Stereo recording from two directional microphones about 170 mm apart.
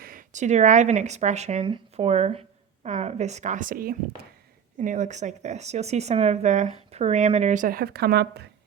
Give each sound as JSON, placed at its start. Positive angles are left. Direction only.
{"t": 0.0, "sound": "speech", "side_deg": -55}
{"t": 4.8, "sound": "speech", "side_deg": -45}